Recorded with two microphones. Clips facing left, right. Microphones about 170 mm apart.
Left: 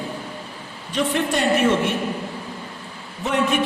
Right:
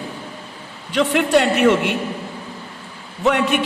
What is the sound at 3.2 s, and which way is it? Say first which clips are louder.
Speech: right 4 dB; 70° right (ahead or behind).